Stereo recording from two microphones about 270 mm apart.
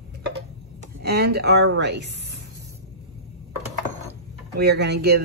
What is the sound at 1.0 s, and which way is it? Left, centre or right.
Speech, right.